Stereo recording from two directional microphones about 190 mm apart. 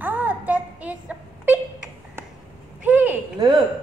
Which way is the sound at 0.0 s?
10° right (ahead or behind).